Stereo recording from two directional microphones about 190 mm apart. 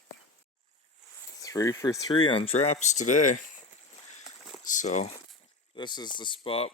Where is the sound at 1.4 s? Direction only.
20° left (ahead or behind); by 3.3 s 40° left (ahead or behind).